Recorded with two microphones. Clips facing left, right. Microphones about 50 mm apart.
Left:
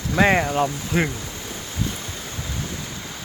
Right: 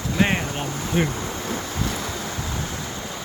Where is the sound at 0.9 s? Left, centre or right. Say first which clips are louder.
Even; left.